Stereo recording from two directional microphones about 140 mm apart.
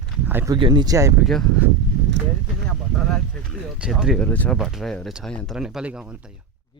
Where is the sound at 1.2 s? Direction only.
Centre (ahead or behind).